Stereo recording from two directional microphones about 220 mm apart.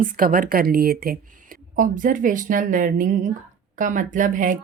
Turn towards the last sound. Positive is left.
turn(degrees=-35)  # may be behind; listen again after turning